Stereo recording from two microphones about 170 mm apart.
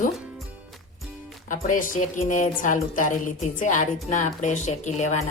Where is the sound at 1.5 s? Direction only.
50° left (ahead or behind).